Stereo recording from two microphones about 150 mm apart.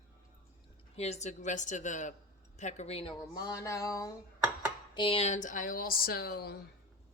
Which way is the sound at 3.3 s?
25° left (ahead or behind).